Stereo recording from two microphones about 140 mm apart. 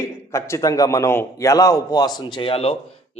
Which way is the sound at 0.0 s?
20° left (ahead or behind).